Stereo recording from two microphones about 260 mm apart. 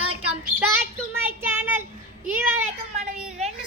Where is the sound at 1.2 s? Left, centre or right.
Centre.